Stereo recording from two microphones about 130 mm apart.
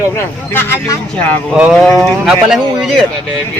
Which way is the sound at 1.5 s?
Centre (ahead or behind).